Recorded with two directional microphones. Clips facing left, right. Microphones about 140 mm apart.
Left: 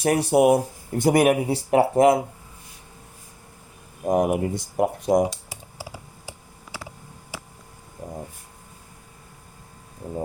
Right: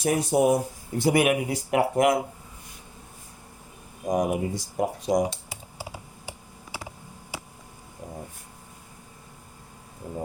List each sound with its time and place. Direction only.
0.0 s speech: 65° left (ahead or behind)
0.9 s speech: 45° left (ahead or behind); by 2.1 s 30° left (ahead or behind)
4.1 s speech: 55° left (ahead or behind)